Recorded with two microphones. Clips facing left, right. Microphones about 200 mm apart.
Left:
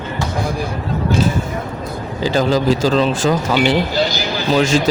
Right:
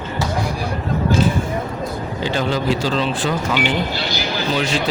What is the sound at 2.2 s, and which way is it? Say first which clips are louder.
Speech: left 5 dB; 40° left (ahead or behind).